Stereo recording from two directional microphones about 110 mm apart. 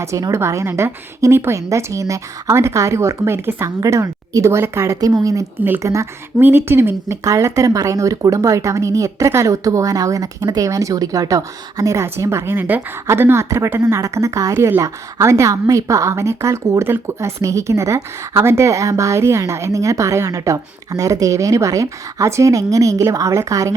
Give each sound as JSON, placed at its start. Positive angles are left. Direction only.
{"t": 0.0, "sound": "speech", "side_deg": -30}
{"t": 5.5, "sound": "speech", "side_deg": -20}